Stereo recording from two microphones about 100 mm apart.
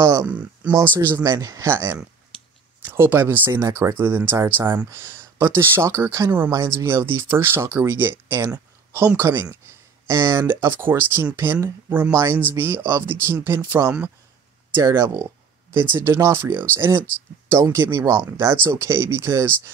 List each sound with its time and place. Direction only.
0.0 s speech: 30° right (ahead or behind)
0.3 s speech: 15° right (ahead or behind)
14.8 s speech: 30° right (ahead or behind)